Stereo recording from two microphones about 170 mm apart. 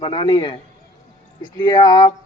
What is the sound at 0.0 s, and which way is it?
A man's voice, 30° left (ahead or behind).